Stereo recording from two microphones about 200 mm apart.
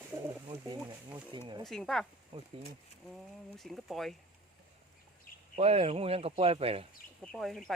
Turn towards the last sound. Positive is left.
turn(degrees=0)  # may be behind; listen again after turning